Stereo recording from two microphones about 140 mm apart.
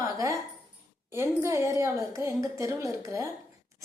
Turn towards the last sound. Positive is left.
turn(degrees=-20)  # may be behind; listen again after turning